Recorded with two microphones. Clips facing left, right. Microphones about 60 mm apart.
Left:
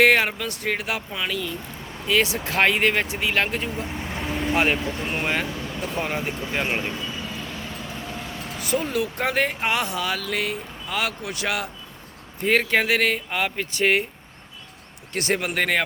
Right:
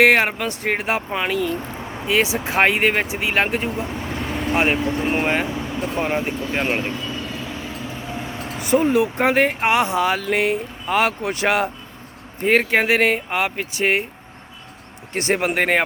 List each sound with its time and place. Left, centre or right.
0.0 s speech: right
4.1 s vehicle: centre
4.5 s speech: centre
5.0 s speech: right
7.0 s vehicle: centre; by 10.6 s right
10.8 s speech: right
12.4 s speech: right
15.1 s speech: right